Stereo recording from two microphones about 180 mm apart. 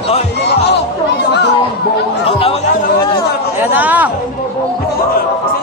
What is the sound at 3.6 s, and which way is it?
Chatter, 10° right (ahead or behind).